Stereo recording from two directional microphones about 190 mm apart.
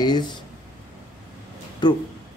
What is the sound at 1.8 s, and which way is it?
Speech, 20° left (ahead or behind).